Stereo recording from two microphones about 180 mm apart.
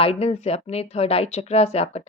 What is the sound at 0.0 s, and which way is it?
A woman's voice, 30° left (ahead or behind).